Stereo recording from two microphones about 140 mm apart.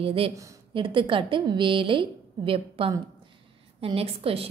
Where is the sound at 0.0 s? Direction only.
40° right (ahead or behind).